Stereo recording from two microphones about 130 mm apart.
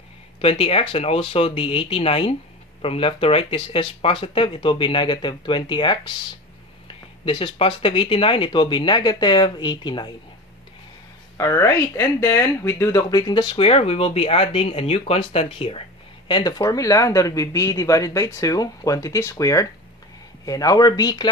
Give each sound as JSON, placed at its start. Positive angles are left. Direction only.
{"t": 0.4, "sound": "speech", "side_deg": 50}
{"t": 7.2, "sound": "speech", "side_deg": 45}
{"t": 11.3, "sound": "speech", "side_deg": 20}
{"t": 16.3, "sound": "speech", "side_deg": 35}